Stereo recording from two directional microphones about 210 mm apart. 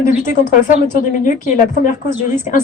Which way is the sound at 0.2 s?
40° left (ahead or behind).